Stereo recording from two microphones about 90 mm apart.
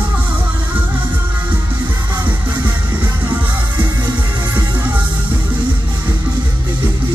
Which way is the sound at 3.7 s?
55° right (ahead or behind).